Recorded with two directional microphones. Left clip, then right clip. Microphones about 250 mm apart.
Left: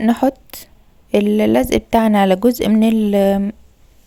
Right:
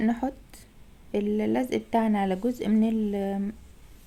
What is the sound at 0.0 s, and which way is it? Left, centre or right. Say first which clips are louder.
Speech: left 13 dB; left.